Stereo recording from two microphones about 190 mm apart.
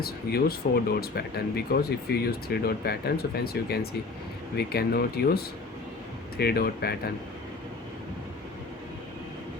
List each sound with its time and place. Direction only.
0.0 s speech: 55° left (ahead or behind)